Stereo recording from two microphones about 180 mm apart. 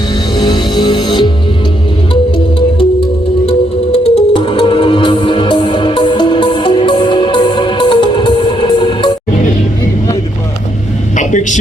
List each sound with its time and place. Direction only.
0.3 s music: 25° left (ahead or behind)
3.9 s music: 35° left (ahead or behind)
11.2 s music: 45° left (ahead or behind)